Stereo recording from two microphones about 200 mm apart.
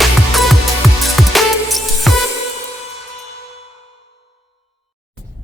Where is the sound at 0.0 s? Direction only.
Centre (ahead or behind).